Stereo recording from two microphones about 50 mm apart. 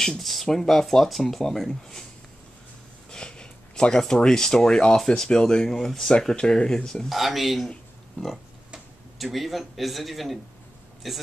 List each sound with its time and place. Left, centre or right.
0.2 s speech: centre
3.1 s a sound: centre
4.1 s speech: centre
7.1 s speech: centre
9.2 s speech: centre